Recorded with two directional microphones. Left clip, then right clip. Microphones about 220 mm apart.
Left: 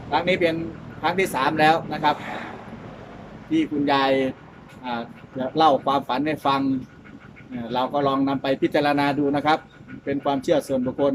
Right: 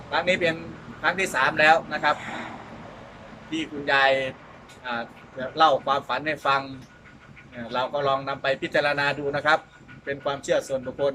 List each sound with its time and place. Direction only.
0.1 s a man's voice: 20° left (ahead or behind)
3.5 s a man's voice: 20° left (ahead or behind)
7.7 s a man's voice: 20° left (ahead or behind)